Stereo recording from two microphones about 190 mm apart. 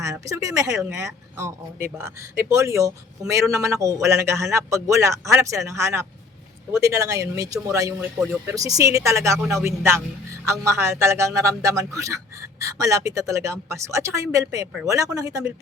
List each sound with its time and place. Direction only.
0.0 s a man's voice: 15° right (ahead or behind)